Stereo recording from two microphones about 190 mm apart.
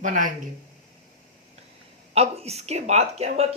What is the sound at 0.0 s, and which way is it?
Speech, 45° right (ahead or behind).